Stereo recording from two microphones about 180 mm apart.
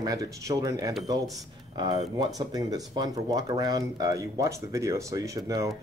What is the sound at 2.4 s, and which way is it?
Speech, 20° right (ahead or behind).